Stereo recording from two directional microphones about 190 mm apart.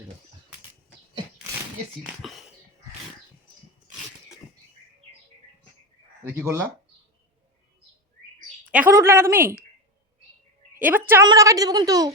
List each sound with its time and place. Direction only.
2.0 s speech: centre (ahead or behind)
6.3 s a woman's voice: 10° right (ahead or behind)
8.7 s a woman's voice: 10° right (ahead or behind)
10.8 s a woman's voice: 10° right (ahead or behind)